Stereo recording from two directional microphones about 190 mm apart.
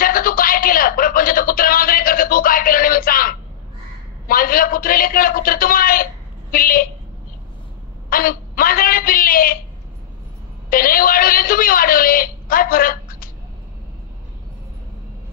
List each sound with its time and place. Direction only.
0.0 s a sound: 50° left (ahead or behind)
4.3 s a man's voice: 50° left (ahead or behind)
8.1 s a man's voice: 50° left (ahead or behind)
10.7 s a woman's voice: 50° left (ahead or behind)